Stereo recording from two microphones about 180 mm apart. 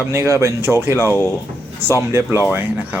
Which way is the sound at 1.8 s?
15° right (ahead or behind).